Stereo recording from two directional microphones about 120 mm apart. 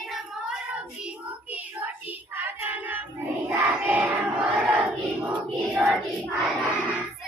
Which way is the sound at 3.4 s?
15° right (ahead or behind).